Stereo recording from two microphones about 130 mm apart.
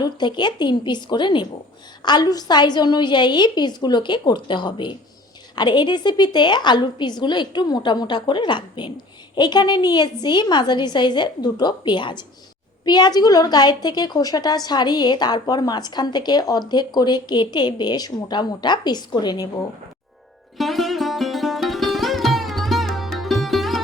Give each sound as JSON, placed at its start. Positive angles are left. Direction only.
{"t": 0.0, "sound": "a woman's voice", "side_deg": 35}
{"t": 20.6, "sound": "sitar", "side_deg": 0}